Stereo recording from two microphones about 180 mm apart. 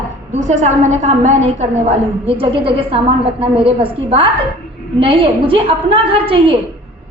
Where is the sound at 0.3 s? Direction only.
40° right (ahead or behind).